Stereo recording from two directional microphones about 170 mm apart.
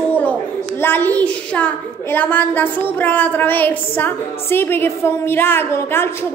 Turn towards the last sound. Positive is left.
turn(degrees=15)  # may be behind; listen again after turning